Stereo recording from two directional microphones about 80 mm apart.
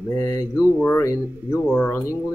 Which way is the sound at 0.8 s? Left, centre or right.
Left.